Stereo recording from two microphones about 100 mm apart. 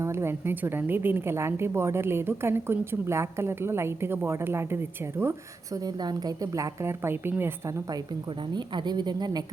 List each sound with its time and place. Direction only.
0.0 s a woman's voice: 25° right (ahead or behind)
5.7 s a woman's voice: 40° right (ahead or behind); by 7.8 s 25° right (ahead or behind)
8.3 s speech: 50° right (ahead or behind)